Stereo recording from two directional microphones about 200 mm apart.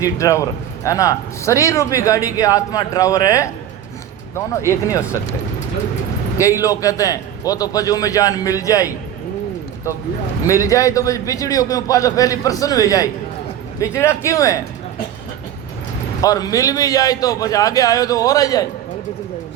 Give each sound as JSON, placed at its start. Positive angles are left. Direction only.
{"t": 0.0, "sound": "speech", "side_deg": 15}
{"t": 6.6, "sound": "speech", "side_deg": 15}
{"t": 10.4, "sound": "speech", "side_deg": 15}
{"t": 16.2, "sound": "speech", "side_deg": 15}